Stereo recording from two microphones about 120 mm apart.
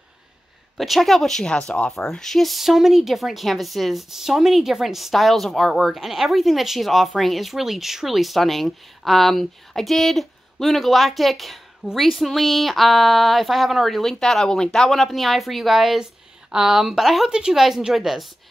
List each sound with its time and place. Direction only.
0.7 s speech: centre (ahead or behind)